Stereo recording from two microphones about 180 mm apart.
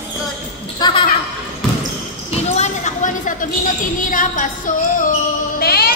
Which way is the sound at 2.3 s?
40° left (ahead or behind).